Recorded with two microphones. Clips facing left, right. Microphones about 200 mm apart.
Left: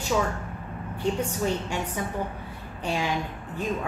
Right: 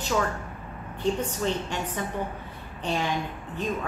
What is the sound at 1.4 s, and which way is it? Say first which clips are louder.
A woman's voice: left 1 dB; 10° left (ahead or behind).